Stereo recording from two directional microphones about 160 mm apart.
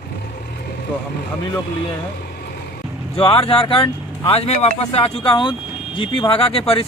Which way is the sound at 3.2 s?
35° left (ahead or behind).